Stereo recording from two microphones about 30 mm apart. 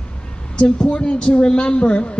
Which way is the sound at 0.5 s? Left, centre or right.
Left.